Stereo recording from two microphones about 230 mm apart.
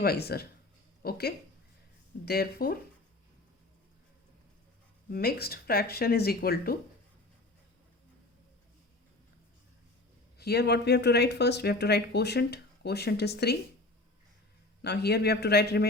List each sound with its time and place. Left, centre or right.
0.0 s speech: left
2.2 s speech: left
5.1 s speech: left
10.3 s speech: left
14.8 s speech: left